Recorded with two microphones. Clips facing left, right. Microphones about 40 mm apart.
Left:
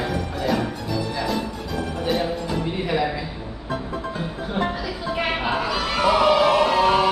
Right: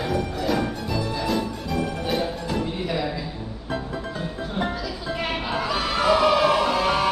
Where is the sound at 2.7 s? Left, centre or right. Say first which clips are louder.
Left 4 dB; left.